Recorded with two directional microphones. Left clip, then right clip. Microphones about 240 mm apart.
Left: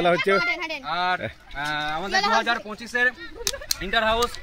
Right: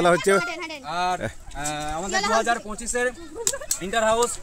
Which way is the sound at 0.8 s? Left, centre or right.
Right.